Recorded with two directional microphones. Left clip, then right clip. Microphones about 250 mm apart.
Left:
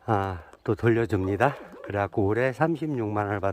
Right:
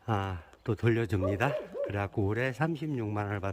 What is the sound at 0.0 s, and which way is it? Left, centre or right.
Speech, left.